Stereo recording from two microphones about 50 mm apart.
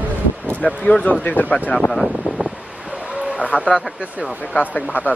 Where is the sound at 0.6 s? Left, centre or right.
Centre.